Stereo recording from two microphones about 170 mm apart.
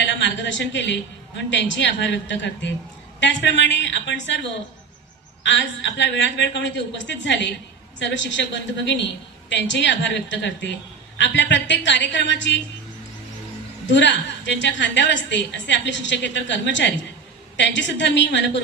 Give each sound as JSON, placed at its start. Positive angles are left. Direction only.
{"t": 0.0, "sound": "a woman's voice", "side_deg": 90}
{"t": 5.4, "sound": "a woman's voice", "side_deg": 90}
{"t": 13.8, "sound": "a woman's voice", "side_deg": 90}